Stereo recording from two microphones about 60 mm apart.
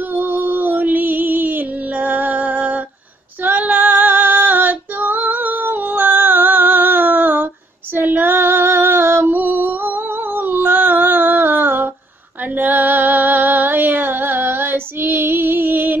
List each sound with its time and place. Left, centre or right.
0.1 s music: right
3.4 s female singing: right